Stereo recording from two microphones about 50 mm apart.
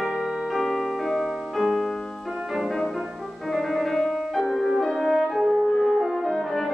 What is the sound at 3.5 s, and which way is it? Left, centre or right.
Music, centre.